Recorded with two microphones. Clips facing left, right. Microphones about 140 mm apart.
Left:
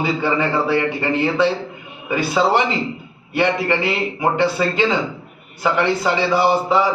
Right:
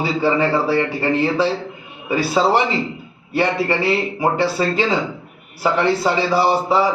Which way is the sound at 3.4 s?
30° right (ahead or behind).